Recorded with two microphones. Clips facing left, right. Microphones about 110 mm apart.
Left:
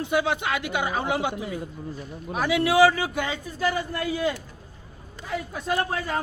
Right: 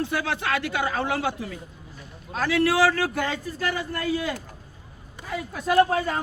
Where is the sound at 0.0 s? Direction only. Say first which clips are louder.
Left 2 dB; 20° left (ahead or behind).